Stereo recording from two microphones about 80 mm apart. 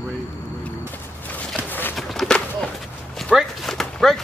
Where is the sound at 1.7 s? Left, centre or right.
Left.